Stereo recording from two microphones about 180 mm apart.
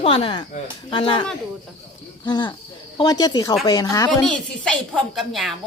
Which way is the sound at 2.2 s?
25° left (ahead or behind).